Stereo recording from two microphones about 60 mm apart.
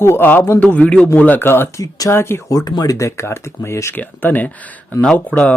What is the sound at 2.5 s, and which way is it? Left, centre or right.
Speech, left.